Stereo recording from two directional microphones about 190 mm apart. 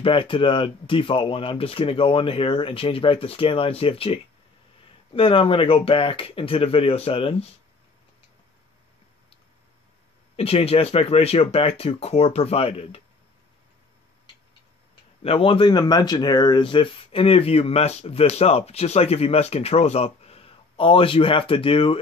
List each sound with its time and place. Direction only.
0.0 s speech: 25° left (ahead or behind)
10.3 s speech: 30° left (ahead or behind)
15.2 s speech: 30° left (ahead or behind)